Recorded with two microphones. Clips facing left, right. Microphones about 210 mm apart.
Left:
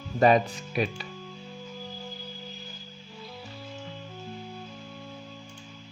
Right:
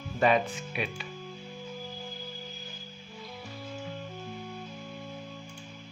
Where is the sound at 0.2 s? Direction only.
40° left (ahead or behind).